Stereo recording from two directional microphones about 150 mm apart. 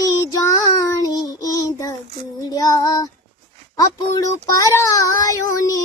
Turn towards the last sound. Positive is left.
turn(degrees=25)  # may be behind; listen again after turning